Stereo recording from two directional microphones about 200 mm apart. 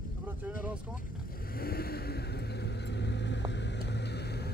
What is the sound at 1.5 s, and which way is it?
Vehicle, 50° left (ahead or behind).